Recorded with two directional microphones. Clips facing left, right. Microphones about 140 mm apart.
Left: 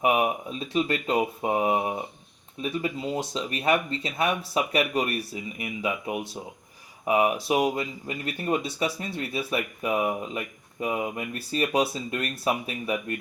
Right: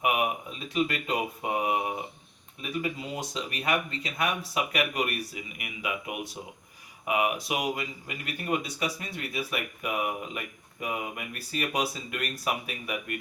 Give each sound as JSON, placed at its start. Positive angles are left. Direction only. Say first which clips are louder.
{"t": 0.0, "sound": "speech", "louder": "left 4 dB", "side_deg": 35}